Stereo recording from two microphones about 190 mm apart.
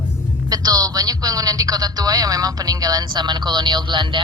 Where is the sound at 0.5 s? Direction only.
20° right (ahead or behind).